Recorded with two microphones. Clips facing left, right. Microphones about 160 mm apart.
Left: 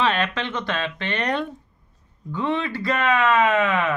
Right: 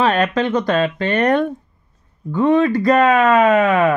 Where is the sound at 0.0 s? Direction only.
45° right (ahead or behind).